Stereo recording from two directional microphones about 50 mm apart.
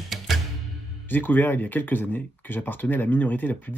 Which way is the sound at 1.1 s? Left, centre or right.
Left.